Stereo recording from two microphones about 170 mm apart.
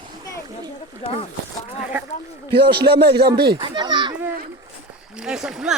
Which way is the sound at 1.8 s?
10° right (ahead or behind).